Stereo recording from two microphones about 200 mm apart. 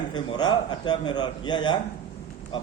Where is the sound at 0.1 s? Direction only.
20° left (ahead or behind).